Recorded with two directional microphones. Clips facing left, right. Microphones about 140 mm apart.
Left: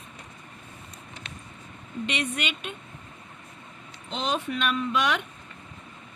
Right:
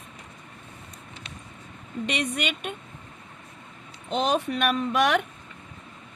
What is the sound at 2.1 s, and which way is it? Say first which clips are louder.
Speech: right 3 dB; 50° right (ahead or behind).